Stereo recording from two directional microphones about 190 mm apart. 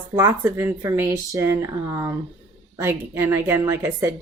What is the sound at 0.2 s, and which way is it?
Speech, 15° right (ahead or behind).